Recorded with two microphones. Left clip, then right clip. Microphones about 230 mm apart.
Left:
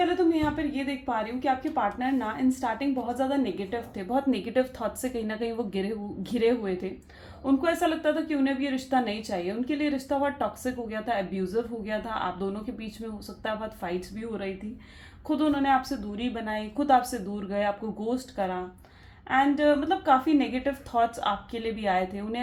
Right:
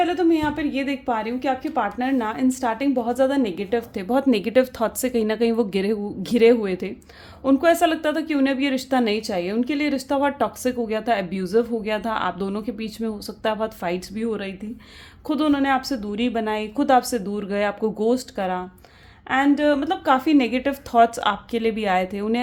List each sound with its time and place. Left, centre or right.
0.0 s a woman's voice: right